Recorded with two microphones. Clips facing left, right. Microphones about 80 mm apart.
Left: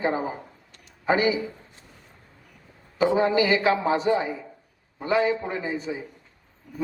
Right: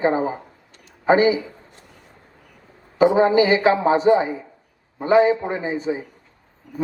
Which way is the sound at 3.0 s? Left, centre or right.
Right.